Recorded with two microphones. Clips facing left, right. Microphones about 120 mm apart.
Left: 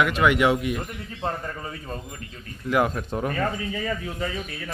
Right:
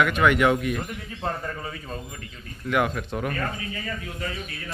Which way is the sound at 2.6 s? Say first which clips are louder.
Left 2 dB; 30° left (ahead or behind).